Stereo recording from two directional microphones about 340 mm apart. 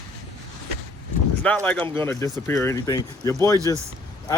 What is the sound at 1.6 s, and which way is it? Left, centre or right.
Speech, centre.